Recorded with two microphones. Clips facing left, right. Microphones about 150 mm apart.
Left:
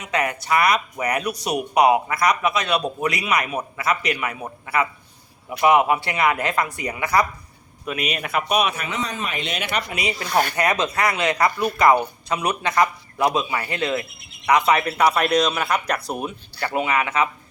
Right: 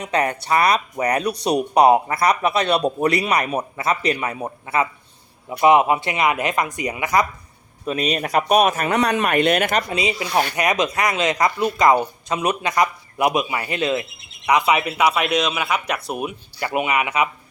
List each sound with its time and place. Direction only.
0.0 s a man's voice: 35° right (ahead or behind)
7.9 s a man's voice: 35° right (ahead or behind)
9.0 s speech: 70° right (ahead or behind); by 9.8 s 50° right (ahead or behind)
9.9 s speech: 20° right (ahead or behind)
16.6 s speech: 20° right (ahead or behind)